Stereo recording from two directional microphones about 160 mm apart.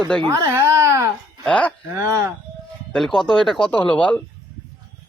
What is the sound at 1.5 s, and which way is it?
Speech, 10° left (ahead or behind).